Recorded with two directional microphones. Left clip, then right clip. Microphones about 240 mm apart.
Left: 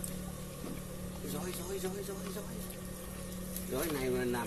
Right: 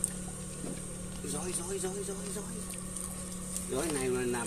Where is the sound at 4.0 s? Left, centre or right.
Right.